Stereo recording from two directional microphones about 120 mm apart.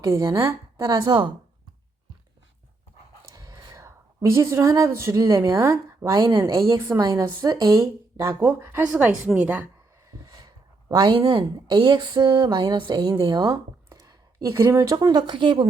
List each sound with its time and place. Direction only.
0.2 s speech: 30° right (ahead or behind)
3.3 s a sound: 30° right (ahead or behind)
5.5 s speech: 20° right (ahead or behind)
6.1 s speech: 40° right (ahead or behind)
6.4 s a woman's voice: 25° right (ahead or behind); by 9.6 s 10° right (ahead or behind)
10.1 s a woman's voice: 30° right (ahead or behind)
14.9 s speech: 40° right (ahead or behind)